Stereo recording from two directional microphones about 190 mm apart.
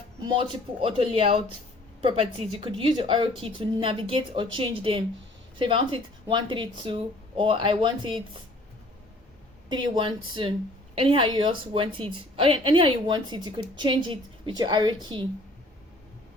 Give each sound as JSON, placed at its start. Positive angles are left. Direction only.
{"t": 0.2, "sound": "a woman's voice", "side_deg": -25}
{"t": 9.6, "sound": "a woman's voice", "side_deg": -25}